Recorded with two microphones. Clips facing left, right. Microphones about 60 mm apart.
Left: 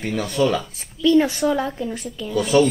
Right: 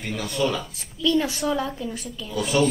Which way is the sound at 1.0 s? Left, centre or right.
Left.